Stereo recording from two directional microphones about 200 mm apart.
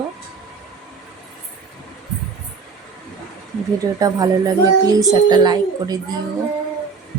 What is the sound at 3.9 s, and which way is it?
Speech, 20° right (ahead or behind).